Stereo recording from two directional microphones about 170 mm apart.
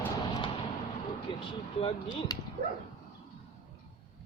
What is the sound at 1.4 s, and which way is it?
Speech, 30° left (ahead or behind).